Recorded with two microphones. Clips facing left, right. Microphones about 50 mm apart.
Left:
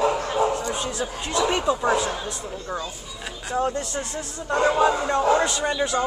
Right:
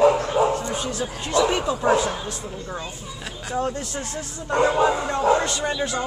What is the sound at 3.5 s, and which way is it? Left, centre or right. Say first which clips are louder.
A man's voice: left 1 dB; centre.